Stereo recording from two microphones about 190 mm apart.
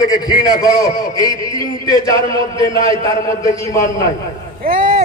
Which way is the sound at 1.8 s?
20° left (ahead or behind).